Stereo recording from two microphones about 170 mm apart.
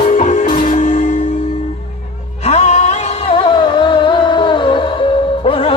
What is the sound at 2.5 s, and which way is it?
Music, 40° left (ahead or behind).